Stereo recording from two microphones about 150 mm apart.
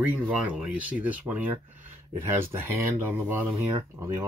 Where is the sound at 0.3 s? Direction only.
5° right (ahead or behind).